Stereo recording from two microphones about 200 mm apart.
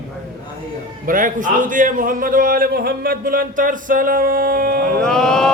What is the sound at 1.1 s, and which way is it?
A man's voice, 40° right (ahead or behind).